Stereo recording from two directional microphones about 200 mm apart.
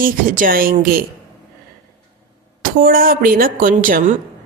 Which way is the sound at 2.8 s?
45° right (ahead or behind).